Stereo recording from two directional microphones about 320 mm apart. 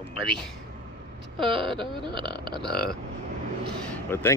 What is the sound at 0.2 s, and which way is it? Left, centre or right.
Speech, centre.